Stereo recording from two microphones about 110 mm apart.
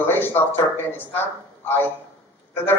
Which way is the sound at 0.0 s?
20° left (ahead or behind).